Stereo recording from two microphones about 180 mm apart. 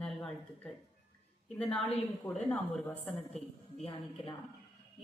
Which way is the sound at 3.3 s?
35° left (ahead or behind).